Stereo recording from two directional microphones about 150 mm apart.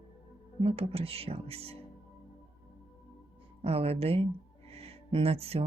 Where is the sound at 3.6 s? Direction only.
40° right (ahead or behind).